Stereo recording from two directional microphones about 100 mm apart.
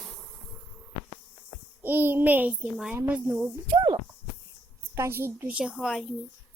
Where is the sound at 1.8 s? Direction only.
20° right (ahead or behind).